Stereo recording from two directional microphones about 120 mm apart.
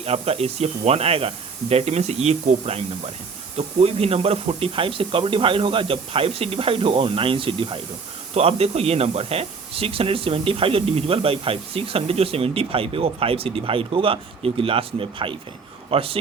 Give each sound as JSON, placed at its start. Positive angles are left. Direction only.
{"t": 0.0, "sound": "speech", "side_deg": -60}
{"t": 8.4, "sound": "speech", "side_deg": -60}